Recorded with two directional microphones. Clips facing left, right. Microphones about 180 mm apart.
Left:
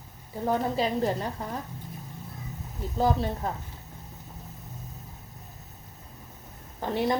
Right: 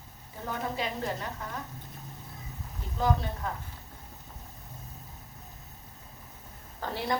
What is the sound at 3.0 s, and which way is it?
Speech, 35° left (ahead or behind).